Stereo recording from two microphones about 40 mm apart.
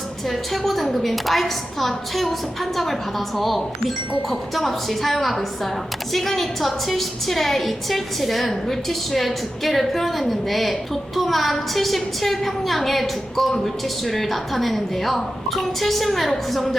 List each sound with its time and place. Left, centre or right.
0.3 s a woman's voice: centre